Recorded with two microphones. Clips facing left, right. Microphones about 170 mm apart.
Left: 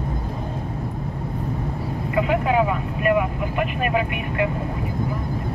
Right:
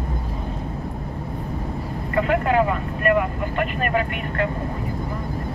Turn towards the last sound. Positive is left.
turn(degrees=15)  # may be behind; listen again after turning